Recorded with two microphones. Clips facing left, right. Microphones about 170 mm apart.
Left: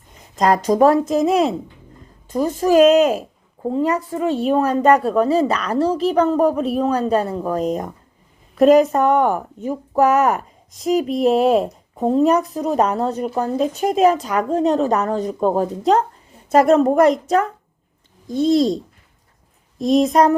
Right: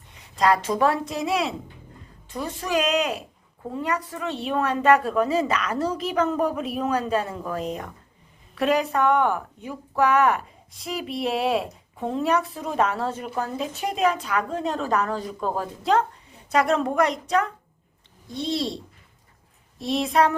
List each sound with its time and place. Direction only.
0.2 s speech: 40° left (ahead or behind)
2.6 s a woman's voice: 40° left (ahead or behind); by 4.3 s 25° left (ahead or behind)
4.3 s a woman's voice: 45° left (ahead or behind)
19.8 s speech: 40° left (ahead or behind)